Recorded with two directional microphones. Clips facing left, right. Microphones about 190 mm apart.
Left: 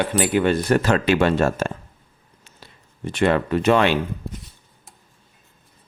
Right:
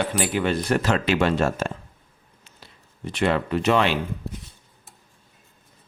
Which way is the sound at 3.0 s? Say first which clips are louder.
Left 3 dB; 50° left (ahead or behind).